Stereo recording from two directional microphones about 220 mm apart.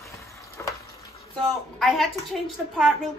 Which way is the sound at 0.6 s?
10° left (ahead or behind).